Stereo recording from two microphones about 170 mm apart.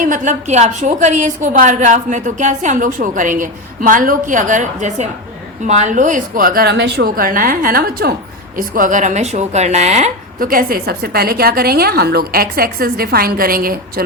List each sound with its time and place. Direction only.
0.0 s a woman's voice: 45° right (ahead or behind)